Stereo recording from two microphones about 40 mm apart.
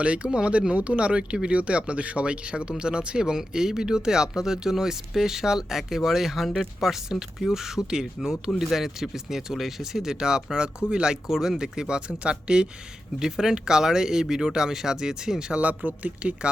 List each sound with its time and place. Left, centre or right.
0.0 s speech: right; by 6.9 s centre
6.9 s speech: centre
11.3 s speech: centre
13.1 s speech: centre
15.6 s speech: right